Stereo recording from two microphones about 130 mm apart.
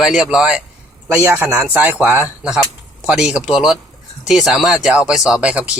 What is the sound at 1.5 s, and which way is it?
Speech, 10° right (ahead or behind).